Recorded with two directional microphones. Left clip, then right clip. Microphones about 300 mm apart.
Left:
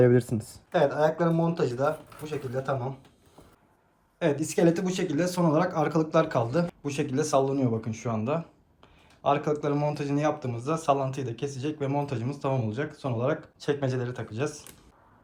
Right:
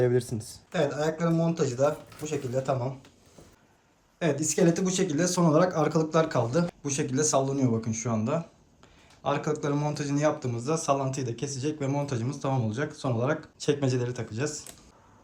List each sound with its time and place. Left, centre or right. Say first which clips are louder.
0.0 s speech: left 4 dB; left
0.7 s speech: left 4 dB; centre
4.2 s speech: left 1 dB; centre